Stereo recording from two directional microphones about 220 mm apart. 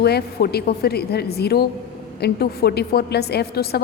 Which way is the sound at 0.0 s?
45° left (ahead or behind).